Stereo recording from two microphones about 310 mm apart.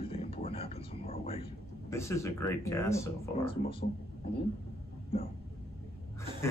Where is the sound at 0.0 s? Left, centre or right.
Centre.